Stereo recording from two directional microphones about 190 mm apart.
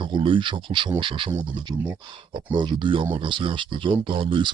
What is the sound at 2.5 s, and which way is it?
Speech, 25° right (ahead or behind).